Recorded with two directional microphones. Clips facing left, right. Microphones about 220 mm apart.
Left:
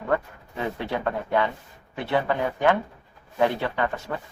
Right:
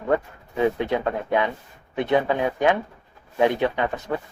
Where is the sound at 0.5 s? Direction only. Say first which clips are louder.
Right 7 dB; 20° right (ahead or behind).